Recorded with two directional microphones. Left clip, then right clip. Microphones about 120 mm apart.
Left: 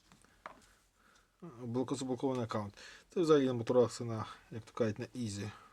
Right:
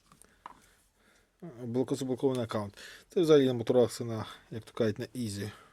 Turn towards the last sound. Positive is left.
turn(degrees=-30)  # may be behind; listen again after turning